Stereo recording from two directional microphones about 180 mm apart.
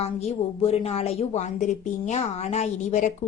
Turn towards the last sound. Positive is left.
turn(degrees=40)  # may be behind; listen again after turning